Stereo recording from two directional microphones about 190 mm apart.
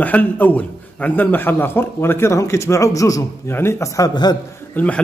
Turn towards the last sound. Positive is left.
turn(degrees=5)  # may be behind; listen again after turning